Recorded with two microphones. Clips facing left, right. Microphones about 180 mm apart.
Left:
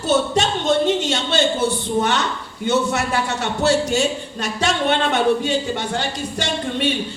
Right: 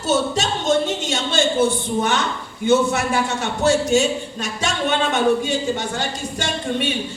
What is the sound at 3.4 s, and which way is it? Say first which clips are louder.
Speech: left 1 dB; 50° right (ahead or behind).